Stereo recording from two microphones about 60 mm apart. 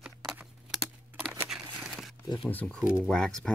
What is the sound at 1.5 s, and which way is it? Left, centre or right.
Crumpling, centre.